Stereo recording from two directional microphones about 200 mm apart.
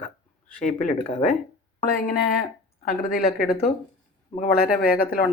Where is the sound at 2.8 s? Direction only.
45° left (ahead or behind).